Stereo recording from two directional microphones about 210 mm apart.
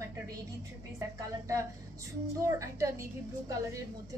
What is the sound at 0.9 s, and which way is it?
A woman's voice, 15° right (ahead or behind).